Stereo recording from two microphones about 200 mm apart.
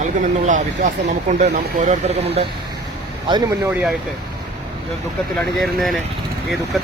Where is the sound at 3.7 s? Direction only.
5° right (ahead or behind).